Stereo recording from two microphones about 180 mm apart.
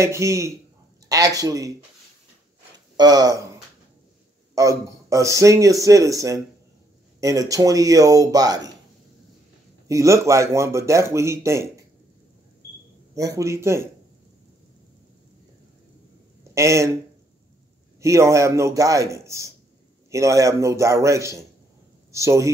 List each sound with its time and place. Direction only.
0.0 s speech: 15° right (ahead or behind)
3.0 s speech: 20° right (ahead or behind)
4.6 s speech: 15° right (ahead or behind)
9.8 s speech: 15° right (ahead or behind)
13.1 s speech: 20° right (ahead or behind)
16.5 s speech: 15° right (ahead or behind)
18.0 s speech: 15° right (ahead or behind)